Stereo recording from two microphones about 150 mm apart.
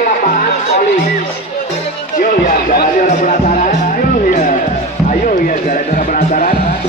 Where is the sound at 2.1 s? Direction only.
60° left (ahead or behind).